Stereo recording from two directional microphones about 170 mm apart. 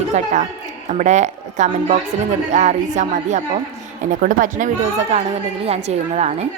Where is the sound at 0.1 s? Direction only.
45° right (ahead or behind).